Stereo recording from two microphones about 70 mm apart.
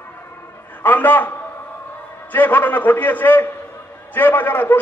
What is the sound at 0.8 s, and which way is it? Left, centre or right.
A man's voice, left.